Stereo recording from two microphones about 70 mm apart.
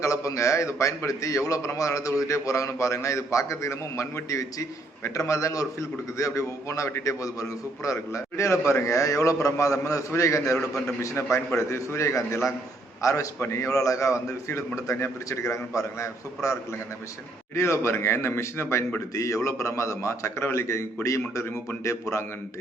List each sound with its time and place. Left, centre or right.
0.0 s a man's voice: left
17.5 s a man's voice: left